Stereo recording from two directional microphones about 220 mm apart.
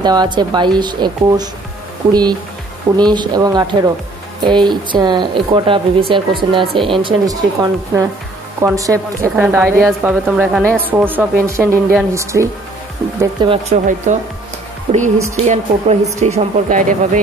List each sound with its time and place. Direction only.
0.0 s speech: 20° right (ahead or behind)
3.0 s a woman's voice: 20° right (ahead or behind); by 17.2 s 35° right (ahead or behind)